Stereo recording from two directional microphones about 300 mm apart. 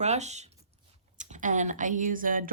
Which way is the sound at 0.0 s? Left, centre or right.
Right.